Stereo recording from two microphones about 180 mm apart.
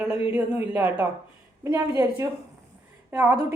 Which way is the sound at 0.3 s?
10° right (ahead or behind).